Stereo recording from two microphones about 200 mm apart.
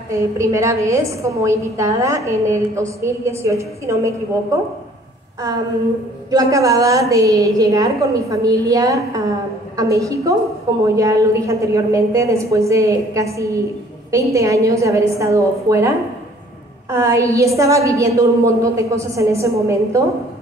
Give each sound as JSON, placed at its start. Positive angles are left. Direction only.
{"t": 0.1, "sound": "a woman's voice", "side_deg": -15}
{"t": 6.3, "sound": "a woman's voice", "side_deg": -15}
{"t": 16.9, "sound": "a woman's voice", "side_deg": -15}